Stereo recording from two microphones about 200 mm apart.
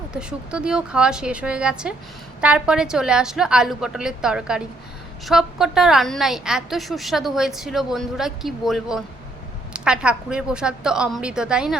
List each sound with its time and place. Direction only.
0.1 s a woman's voice: 5° right (ahead or behind)